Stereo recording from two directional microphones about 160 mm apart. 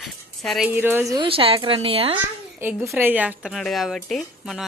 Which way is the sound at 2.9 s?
10° right (ahead or behind).